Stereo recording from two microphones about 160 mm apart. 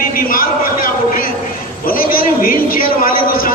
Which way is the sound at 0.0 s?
65° left (ahead or behind).